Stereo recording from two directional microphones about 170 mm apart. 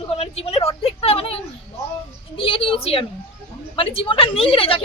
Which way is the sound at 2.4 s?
30° left (ahead or behind).